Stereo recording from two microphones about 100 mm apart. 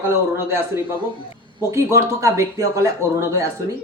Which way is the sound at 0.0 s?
25° right (ahead or behind).